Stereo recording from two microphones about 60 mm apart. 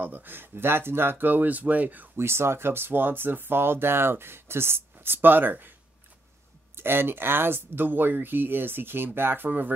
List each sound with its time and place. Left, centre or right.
0.0 s speech: right
2.1 s speech: right
6.8 s speech: right